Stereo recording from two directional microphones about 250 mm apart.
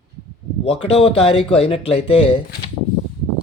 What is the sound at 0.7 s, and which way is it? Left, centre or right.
Speech, left.